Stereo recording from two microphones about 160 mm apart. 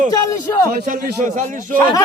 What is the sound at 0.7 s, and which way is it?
Speech, 60° right (ahead or behind).